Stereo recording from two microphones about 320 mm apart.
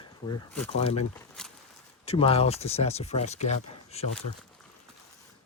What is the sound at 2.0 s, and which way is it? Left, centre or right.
Speech, centre.